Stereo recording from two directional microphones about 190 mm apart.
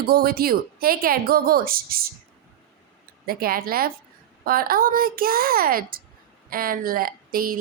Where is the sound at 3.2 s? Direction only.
50° right (ahead or behind).